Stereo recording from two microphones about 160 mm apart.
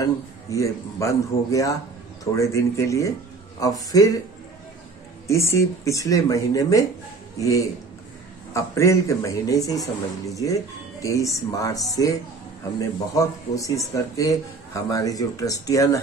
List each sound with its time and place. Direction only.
0.0 s speech: 20° left (ahead or behind)
5.2 s speech: 15° left (ahead or behind)